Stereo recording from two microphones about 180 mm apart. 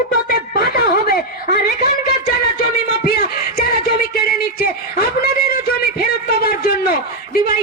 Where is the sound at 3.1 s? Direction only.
55° left (ahead or behind).